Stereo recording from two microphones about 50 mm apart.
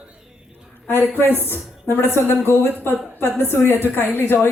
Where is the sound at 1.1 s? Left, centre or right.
Left.